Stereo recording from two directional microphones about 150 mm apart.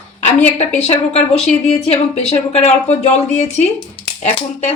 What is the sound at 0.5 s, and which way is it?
A woman's voice, 45° left (ahead or behind).